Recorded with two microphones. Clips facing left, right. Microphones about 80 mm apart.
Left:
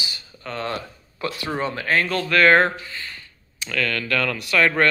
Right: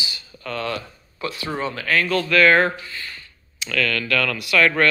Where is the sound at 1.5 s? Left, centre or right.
Left.